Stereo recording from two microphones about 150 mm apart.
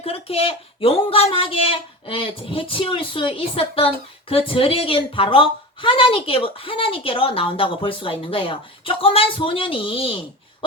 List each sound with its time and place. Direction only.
0.0 s speech: 40° left (ahead or behind)